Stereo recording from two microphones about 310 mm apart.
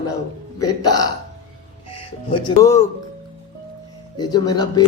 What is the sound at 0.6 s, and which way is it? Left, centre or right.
Speech, centre.